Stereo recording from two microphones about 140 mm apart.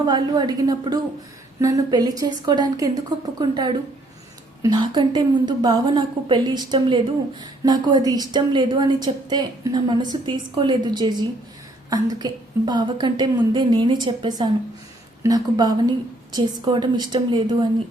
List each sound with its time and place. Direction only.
0.0 s a woman's voice: 30° right (ahead or behind)